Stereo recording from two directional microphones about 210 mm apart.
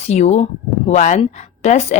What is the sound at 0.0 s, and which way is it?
A woman's voice, 30° left (ahead or behind).